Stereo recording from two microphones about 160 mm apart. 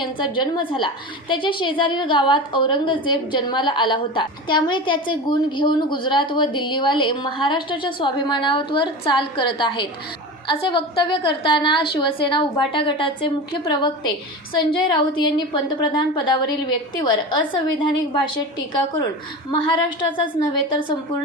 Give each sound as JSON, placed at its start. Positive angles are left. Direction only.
{"t": 0.0, "sound": "a woman's voice", "side_deg": 30}
{"t": 19.5, "sound": "a woman's voice", "side_deg": 30}